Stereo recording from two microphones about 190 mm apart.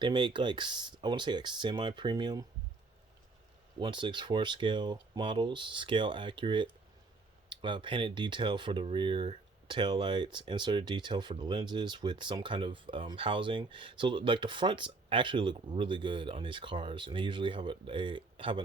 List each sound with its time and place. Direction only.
0.0 s speech: 25° right (ahead or behind)
3.8 s speech: 25° right (ahead or behind)